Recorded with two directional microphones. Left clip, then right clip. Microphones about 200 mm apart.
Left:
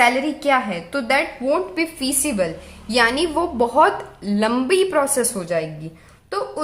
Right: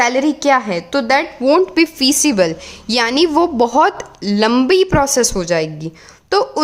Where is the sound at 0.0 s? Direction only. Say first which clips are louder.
Right 3 dB; 50° right (ahead or behind).